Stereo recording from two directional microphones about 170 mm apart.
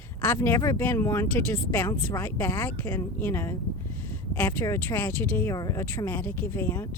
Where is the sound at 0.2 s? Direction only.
15° left (ahead or behind).